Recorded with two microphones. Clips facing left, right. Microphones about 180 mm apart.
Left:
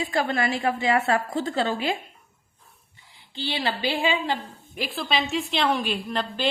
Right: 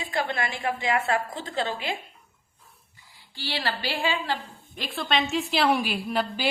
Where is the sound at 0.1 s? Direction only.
40° left (ahead or behind).